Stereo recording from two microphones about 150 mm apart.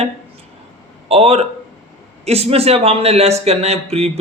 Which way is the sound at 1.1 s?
40° right (ahead or behind).